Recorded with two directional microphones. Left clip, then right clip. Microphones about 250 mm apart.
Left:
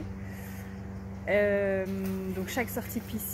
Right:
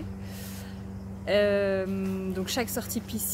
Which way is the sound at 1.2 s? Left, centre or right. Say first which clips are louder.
Right 2 dB; centre.